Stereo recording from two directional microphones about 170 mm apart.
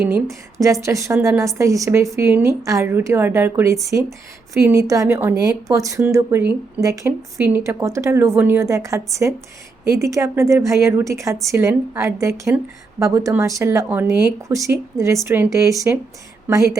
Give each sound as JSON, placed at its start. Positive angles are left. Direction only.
{"t": 0.6, "sound": "a woman's voice", "side_deg": -20}